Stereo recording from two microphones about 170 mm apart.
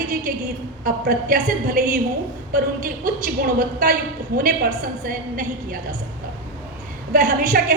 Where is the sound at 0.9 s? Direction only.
55° right (ahead or behind).